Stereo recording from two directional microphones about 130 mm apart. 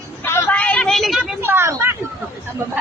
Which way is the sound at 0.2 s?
15° left (ahead or behind).